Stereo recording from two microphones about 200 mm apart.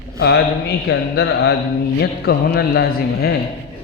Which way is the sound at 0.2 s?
60° left (ahead or behind).